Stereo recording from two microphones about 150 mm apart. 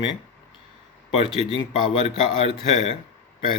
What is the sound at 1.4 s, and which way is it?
Speech, 45° left (ahead or behind).